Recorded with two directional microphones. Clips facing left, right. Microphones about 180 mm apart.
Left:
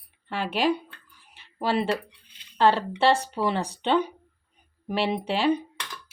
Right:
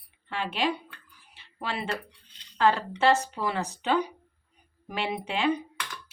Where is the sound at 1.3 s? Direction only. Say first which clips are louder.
Left 8 dB; 40° left (ahead or behind).